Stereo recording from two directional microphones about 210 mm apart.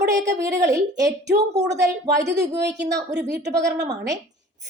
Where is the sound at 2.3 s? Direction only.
55° right (ahead or behind).